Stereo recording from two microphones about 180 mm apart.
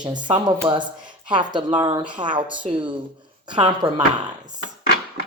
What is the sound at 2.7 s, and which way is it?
Speech, 40° right (ahead or behind).